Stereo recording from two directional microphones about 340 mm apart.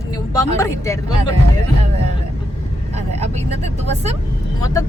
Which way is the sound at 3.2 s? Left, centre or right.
Centre.